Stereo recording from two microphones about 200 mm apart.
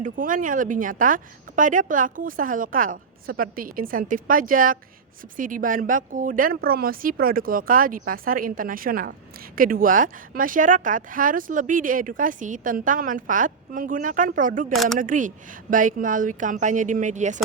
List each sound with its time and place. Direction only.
0.0 s speech: 40° right (ahead or behind)
14.7 s speech: centre (ahead or behind)
14.9 s speech: 40° right (ahead or behind)